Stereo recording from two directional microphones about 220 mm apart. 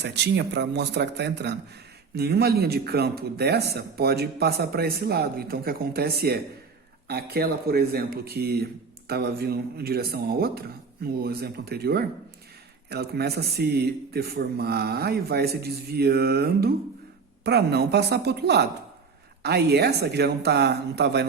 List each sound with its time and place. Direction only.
0.0 s a man's voice: 50° right (ahead or behind)